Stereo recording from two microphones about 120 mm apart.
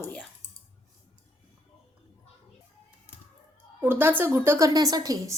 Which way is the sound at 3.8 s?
15° right (ahead or behind).